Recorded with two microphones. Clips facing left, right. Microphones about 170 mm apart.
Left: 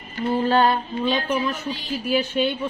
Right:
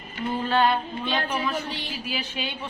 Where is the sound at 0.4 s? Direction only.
40° left (ahead or behind).